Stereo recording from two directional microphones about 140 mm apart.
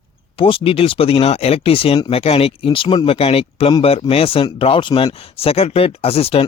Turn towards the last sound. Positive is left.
turn(degrees=45)  # may be behind; listen again after turning